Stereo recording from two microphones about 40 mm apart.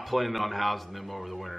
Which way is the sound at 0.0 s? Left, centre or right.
Centre.